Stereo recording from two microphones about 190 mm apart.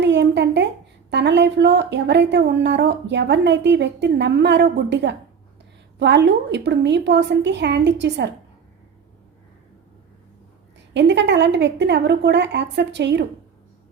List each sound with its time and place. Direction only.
0.0 s a sound: 65° right (ahead or behind)
1.1 s speech: 65° right (ahead or behind)
10.9 s speech: 65° right (ahead or behind)